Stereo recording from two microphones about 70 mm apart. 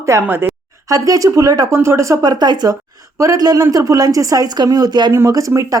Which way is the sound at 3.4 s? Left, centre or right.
Right.